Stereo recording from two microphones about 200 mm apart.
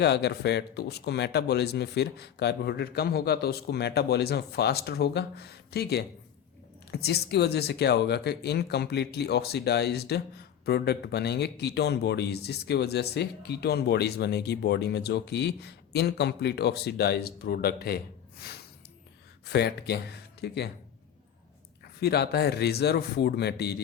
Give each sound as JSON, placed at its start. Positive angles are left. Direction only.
{"t": 0.0, "sound": "speech", "side_deg": 55}
{"t": 22.0, "sound": "speech", "side_deg": 55}